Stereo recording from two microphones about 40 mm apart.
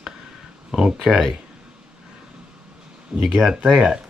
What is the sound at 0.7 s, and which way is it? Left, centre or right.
Speech, centre.